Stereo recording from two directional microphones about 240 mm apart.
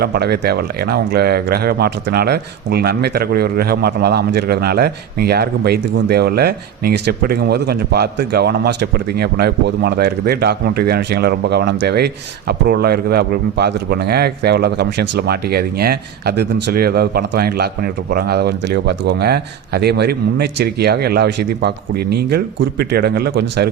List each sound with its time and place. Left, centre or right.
0.0 s speech: right